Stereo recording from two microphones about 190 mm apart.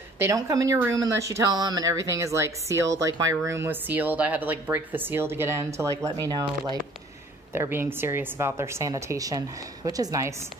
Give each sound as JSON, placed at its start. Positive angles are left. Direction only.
{"t": 0.2, "sound": "speech", "side_deg": -15}
{"t": 7.5, "sound": "a woman's voice", "side_deg": -10}